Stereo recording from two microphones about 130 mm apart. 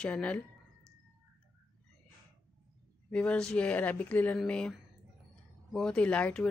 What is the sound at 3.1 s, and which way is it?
Speech, 5° left (ahead or behind).